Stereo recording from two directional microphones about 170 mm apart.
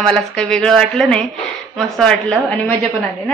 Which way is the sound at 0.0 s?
5° left (ahead or behind).